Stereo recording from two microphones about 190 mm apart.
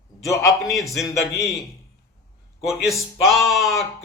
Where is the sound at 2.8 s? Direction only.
Centre (ahead or behind).